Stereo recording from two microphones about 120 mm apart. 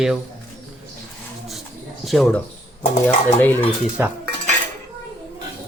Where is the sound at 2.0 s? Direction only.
Centre (ahead or behind).